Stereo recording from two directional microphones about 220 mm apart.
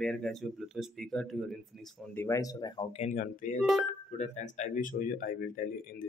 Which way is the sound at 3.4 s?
35° left (ahead or behind).